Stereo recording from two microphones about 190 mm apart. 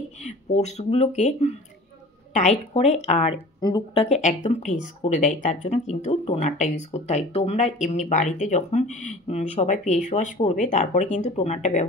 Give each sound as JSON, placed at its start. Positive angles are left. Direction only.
{"t": 0.5, "sound": "speech", "side_deg": 35}